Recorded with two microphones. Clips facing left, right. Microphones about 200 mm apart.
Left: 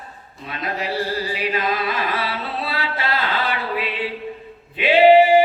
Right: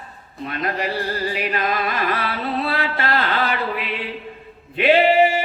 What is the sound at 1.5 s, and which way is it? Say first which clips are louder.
Carnatic music: even; 55° right (ahead or behind).